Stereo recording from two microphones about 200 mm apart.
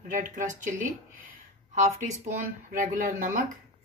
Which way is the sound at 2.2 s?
40° right (ahead or behind).